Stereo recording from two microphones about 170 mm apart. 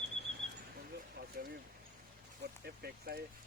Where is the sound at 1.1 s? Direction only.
70° right (ahead or behind).